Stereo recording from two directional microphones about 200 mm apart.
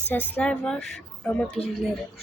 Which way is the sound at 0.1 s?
10° left (ahead or behind).